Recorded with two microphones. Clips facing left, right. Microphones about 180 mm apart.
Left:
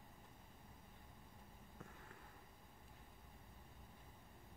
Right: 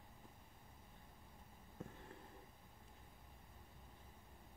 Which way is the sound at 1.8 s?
30° right (ahead or behind).